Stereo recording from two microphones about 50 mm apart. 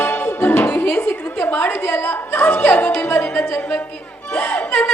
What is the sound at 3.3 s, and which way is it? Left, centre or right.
Speech, left.